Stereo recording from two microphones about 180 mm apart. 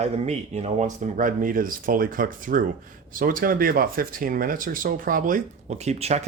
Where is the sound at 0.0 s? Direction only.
40° right (ahead or behind).